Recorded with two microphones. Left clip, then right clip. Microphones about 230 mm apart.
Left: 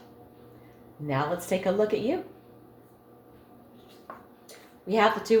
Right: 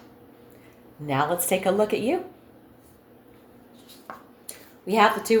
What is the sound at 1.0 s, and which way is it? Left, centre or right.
Speech, right.